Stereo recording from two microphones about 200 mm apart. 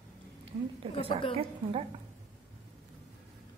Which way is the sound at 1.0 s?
25° left (ahead or behind).